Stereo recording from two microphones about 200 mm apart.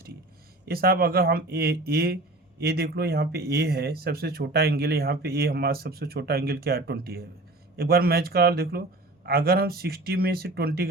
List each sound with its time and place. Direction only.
0.6 s speech: 50° right (ahead or behind)